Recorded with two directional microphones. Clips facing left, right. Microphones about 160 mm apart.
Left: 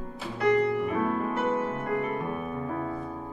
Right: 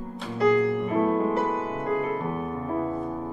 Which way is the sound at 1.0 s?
25° right (ahead or behind).